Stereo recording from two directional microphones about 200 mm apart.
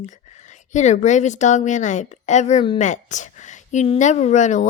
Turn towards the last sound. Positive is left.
turn(degrees=35)  # may be behind; listen again after turning